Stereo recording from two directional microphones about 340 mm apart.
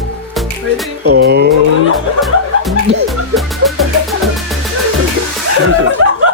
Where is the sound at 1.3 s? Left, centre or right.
Right.